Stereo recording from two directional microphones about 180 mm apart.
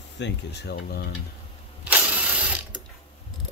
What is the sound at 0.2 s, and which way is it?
Speech, 70° left (ahead or behind).